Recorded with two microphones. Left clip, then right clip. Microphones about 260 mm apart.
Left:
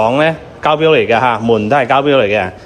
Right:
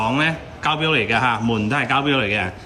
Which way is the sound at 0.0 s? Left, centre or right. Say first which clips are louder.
Left 8 dB; centre.